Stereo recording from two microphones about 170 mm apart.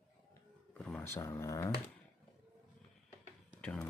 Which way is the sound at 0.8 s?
15° left (ahead or behind).